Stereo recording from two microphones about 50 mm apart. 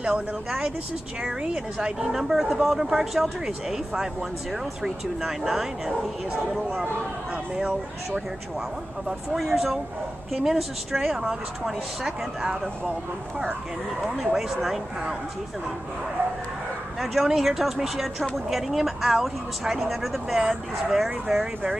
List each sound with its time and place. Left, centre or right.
0.0 s speech: centre
9.3 s speech: centre
14.1 s speech: centre
17.0 s speech: centre